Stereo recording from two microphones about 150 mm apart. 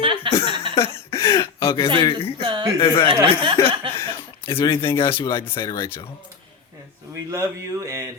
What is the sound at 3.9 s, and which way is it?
Chuckle, 15° left (ahead or behind).